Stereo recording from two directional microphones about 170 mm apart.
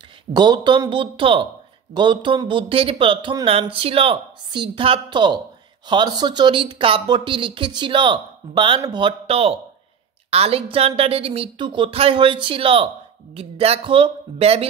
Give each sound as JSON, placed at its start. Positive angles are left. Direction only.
{"t": 0.3, "sound": "a woman's voice", "side_deg": -25}